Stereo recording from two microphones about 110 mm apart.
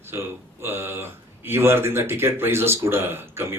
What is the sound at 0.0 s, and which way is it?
Speech, 20° right (ahead or behind).